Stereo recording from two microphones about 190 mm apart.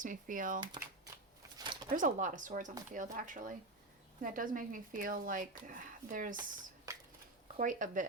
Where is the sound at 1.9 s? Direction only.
45° right (ahead or behind).